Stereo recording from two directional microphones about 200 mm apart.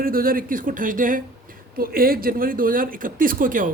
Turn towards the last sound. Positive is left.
turn(degrees=-45)  # may be behind; listen again after turning